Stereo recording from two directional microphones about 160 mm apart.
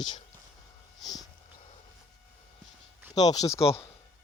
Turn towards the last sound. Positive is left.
turn(degrees=20)  # may be behind; listen again after turning